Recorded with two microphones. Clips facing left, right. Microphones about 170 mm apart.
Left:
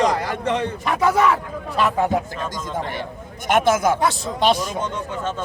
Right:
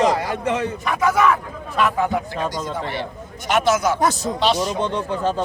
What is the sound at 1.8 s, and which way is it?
Speech, 35° left (ahead or behind).